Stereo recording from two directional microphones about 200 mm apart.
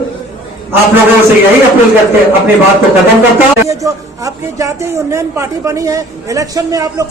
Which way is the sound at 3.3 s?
15° right (ahead or behind).